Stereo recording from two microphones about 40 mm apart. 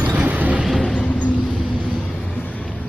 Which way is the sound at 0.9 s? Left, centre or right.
Left.